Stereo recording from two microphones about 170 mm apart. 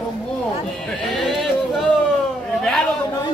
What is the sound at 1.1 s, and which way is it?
Speech, centre (ahead or behind).